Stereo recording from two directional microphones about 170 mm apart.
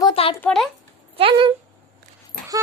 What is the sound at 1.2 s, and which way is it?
Speech, 30° right (ahead or behind).